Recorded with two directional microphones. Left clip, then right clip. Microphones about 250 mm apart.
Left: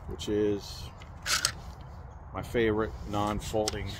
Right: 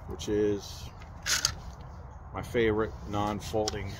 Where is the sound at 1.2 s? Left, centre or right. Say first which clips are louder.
Even; centre.